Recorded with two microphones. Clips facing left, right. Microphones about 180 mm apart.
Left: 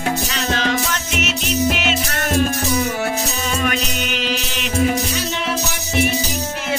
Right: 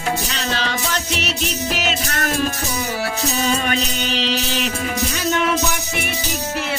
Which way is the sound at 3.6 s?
30° right (ahead or behind).